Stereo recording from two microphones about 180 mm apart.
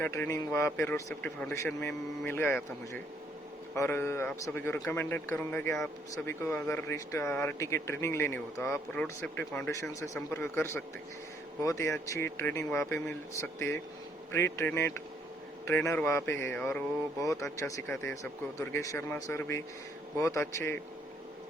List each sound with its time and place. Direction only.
0.0 s speech: 15° left (ahead or behind)
3.8 s speech: 15° left (ahead or behind)